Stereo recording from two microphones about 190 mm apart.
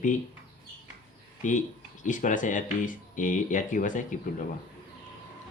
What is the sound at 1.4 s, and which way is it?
Speech, 40° left (ahead or behind).